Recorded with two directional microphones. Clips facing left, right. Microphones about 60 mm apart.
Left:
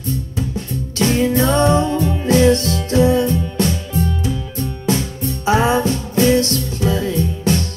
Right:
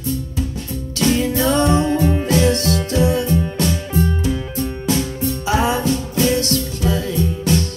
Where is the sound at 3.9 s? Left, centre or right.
Right.